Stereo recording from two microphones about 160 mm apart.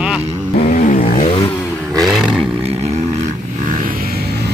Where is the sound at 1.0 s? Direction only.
40° left (ahead or behind).